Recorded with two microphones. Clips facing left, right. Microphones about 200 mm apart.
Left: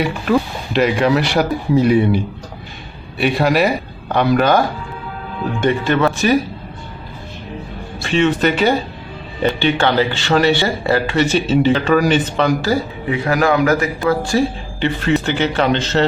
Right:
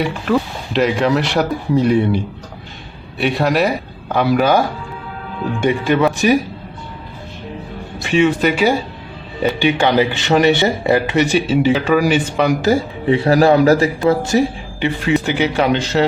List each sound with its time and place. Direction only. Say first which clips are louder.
0.0 s speech: left 1 dB; centre (ahead or behind); by 6.3 s 15° right (ahead or behind)
7.9 s speech: right 1 dB; 15° right (ahead or behind)
12.7 s speech: right 4 dB; 30° right (ahead or behind); by 16.0 s 10° right (ahead or behind)